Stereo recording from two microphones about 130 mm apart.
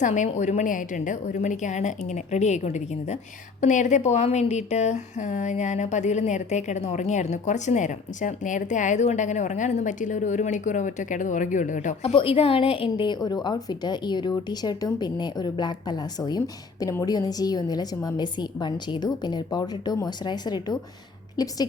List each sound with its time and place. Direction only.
0.0 s speech: 70° left (ahead or behind)
12.1 s a woman's voice: 45° left (ahead or behind)